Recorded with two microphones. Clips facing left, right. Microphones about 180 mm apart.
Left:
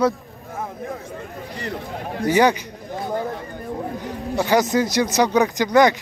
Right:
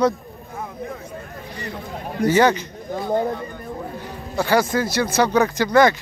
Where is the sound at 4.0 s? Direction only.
15° left (ahead or behind).